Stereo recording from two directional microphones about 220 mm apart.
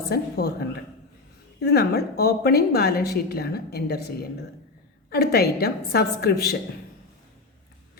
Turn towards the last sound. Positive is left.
turn(degrees=45)  # may be behind; listen again after turning